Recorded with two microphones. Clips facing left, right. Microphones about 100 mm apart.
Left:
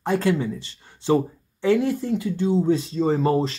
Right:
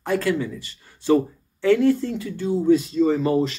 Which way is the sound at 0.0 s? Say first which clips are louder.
Left 1 dB; 20° left (ahead or behind).